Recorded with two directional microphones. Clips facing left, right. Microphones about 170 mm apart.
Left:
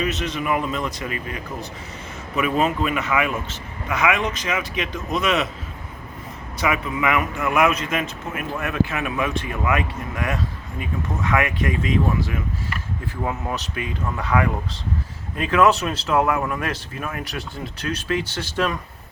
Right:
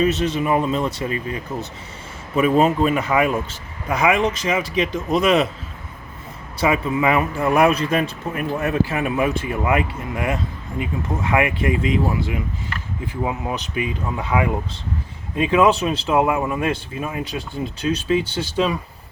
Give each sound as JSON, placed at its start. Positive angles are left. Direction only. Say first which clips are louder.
{"t": 0.0, "sound": "a man's voice", "louder": "right 6 dB", "side_deg": -30}
{"t": 6.6, "sound": "a man's voice", "louder": "right 4 dB", "side_deg": -30}
{"t": 17.6, "sound": "speech", "louder": "right 10 dB", "side_deg": -10}
{"t": 18.6, "sound": "a man's voice", "louder": "right 3 dB", "side_deg": -20}